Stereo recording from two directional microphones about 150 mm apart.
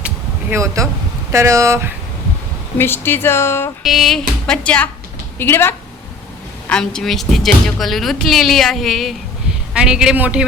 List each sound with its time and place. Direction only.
0.5 s speech: 20° right (ahead or behind)
2.7 s speech: 15° left (ahead or behind)
3.8 s speech: centre (ahead or behind)